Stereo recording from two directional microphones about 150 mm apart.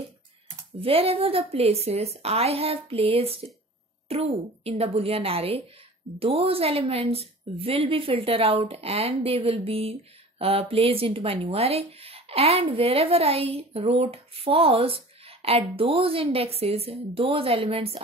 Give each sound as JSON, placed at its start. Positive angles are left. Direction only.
{"t": 0.7, "sound": "speech", "side_deg": -40}